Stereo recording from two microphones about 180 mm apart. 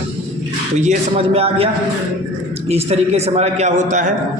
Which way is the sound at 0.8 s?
35° right (ahead or behind).